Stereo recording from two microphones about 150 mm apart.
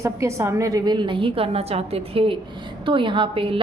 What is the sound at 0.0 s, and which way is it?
A woman's voice, 20° right (ahead or behind).